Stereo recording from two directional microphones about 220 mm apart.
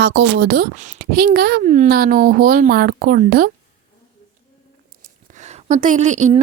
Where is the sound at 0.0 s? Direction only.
50° right (ahead or behind).